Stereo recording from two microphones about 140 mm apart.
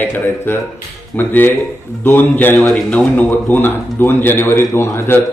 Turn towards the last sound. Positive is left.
turn(degrees=15)  # may be behind; listen again after turning